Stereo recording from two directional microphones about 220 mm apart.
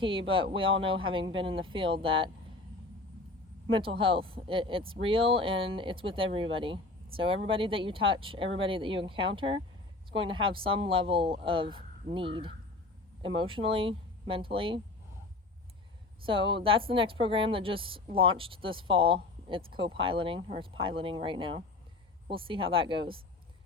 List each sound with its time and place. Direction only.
0.0 s speech: 25° right (ahead or behind)
3.7 s speech: 25° right (ahead or behind)
16.2 s speech: 25° right (ahead or behind)